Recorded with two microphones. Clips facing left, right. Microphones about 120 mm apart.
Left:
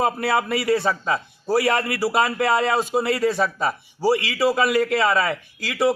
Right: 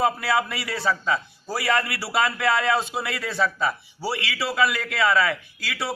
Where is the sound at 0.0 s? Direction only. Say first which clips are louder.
Left 1 dB; 45° left (ahead or behind).